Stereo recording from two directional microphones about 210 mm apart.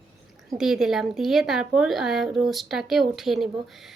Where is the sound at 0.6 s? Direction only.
Centre (ahead or behind).